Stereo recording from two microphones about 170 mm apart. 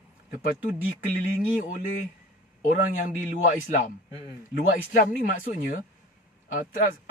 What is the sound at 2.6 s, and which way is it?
A man's voice, 50° left (ahead or behind).